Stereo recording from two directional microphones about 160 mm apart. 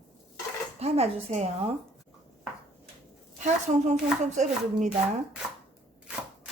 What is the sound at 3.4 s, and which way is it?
Speech, 45° right (ahead or behind).